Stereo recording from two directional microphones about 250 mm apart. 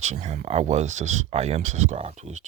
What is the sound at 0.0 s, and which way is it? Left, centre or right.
Speech, right.